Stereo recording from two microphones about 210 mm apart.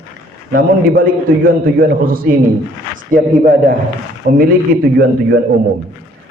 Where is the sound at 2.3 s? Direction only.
45° right (ahead or behind).